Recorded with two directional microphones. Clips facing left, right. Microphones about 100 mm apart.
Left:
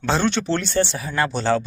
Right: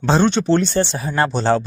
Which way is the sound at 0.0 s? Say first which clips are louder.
Right 5 dB; 20° right (ahead or behind).